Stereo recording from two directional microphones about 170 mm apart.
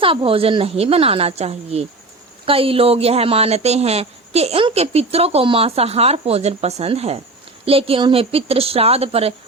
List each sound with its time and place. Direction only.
0.0 s speech: 30° right (ahead or behind)